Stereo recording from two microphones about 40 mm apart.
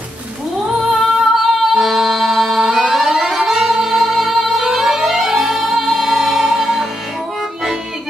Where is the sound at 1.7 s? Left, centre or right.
Centre.